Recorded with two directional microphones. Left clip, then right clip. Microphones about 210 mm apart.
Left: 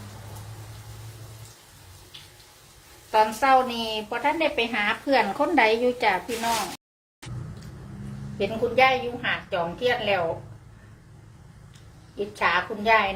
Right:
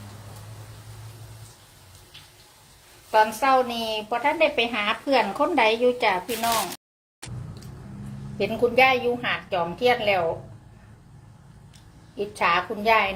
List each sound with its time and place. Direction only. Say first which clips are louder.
3.1 s a woman's voice: even; 10° right (ahead or behind)
8.4 s a woman's voice: right 2 dB; 20° right (ahead or behind)
12.1 s a woman's voice: right 1 dB; 20° right (ahead or behind)